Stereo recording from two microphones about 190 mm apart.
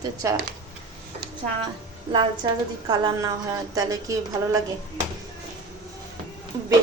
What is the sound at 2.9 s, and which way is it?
Speech, 20° right (ahead or behind).